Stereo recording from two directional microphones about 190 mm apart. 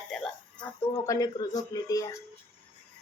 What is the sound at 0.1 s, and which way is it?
Speech, 5° left (ahead or behind).